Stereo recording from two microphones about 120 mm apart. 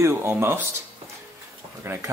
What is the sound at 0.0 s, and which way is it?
Speech, 20° right (ahead or behind).